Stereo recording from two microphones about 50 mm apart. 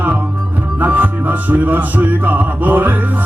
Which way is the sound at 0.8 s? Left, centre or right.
Right.